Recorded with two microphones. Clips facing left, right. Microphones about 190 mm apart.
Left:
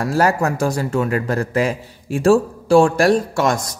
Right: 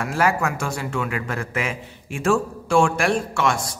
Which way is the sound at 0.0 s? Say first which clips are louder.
Left 4 dB; 40° left (ahead or behind).